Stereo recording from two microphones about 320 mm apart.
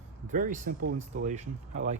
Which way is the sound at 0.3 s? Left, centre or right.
Right.